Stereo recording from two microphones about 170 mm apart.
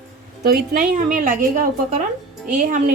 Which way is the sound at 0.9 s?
50° right (ahead or behind).